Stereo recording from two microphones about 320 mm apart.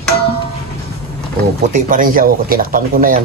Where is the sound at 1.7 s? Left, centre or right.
Right.